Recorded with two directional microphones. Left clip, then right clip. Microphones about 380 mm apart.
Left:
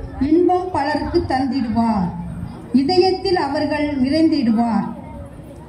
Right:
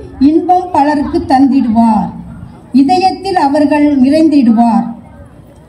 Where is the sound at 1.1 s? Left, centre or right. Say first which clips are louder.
Right 10 dB; centre.